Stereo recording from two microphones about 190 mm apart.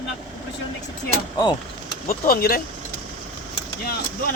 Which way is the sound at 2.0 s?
50° left (ahead or behind).